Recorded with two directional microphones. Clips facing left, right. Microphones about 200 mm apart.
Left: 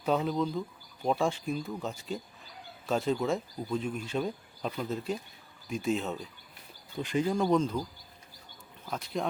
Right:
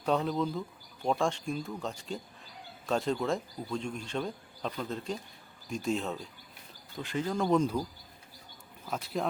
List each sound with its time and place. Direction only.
0.0 s speech: centre (ahead or behind)
7.0 s speech: 15° left (ahead or behind)
7.3 s speech: 5° left (ahead or behind)
7.6 s speech: 10° right (ahead or behind)
8.9 s speech: 5° right (ahead or behind)